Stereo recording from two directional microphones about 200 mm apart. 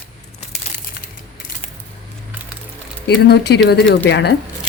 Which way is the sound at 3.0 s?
55° left (ahead or behind).